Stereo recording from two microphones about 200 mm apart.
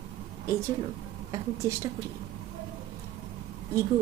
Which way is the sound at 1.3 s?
15° right (ahead or behind).